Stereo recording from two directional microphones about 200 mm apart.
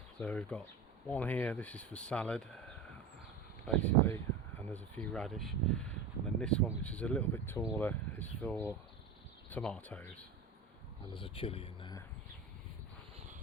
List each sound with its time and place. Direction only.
0.2 s speech: 5° left (ahead or behind)
3.7 s speech: 10° left (ahead or behind)
11.1 s speech: 25° left (ahead or behind)